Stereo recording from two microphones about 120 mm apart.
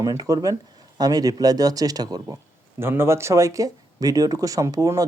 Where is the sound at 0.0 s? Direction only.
30° right (ahead or behind).